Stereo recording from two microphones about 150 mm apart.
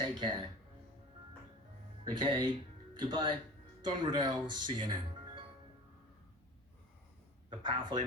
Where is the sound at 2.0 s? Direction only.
30° right (ahead or behind).